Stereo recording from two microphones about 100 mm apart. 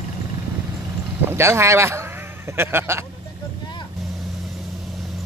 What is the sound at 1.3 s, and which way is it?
A man's voice, 25° right (ahead or behind).